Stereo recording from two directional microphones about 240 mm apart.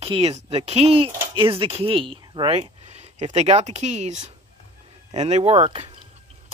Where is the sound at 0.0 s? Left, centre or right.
Right.